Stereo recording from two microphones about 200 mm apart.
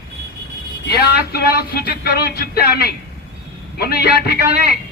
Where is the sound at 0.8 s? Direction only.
55° left (ahead or behind).